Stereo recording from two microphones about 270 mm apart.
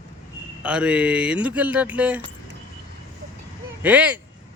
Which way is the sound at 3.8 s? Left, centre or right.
Centre.